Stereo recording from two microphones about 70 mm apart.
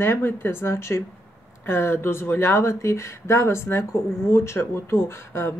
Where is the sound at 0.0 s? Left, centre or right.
Left.